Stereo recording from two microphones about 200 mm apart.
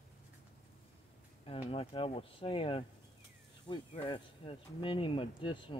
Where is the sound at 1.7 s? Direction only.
30° left (ahead or behind).